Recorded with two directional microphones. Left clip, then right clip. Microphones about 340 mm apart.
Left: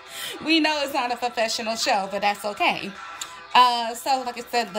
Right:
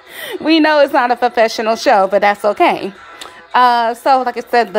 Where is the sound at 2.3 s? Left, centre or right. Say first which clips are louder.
Right 13 dB; right.